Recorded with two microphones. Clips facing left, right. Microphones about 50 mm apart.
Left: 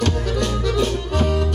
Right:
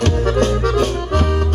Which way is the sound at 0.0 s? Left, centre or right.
Right.